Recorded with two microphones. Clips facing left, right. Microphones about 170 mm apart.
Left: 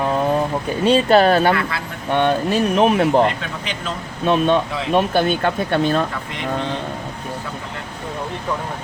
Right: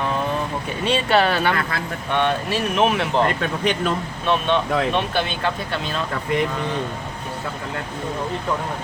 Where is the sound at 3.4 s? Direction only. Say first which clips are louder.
Right 6 dB; 55° right (ahead or behind).